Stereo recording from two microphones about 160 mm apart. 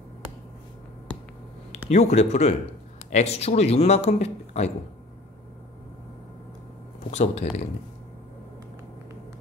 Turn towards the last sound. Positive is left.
turn(degrees=45)  # may be behind; listen again after turning